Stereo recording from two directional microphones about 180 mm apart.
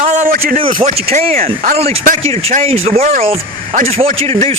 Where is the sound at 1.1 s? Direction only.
35° right (ahead or behind).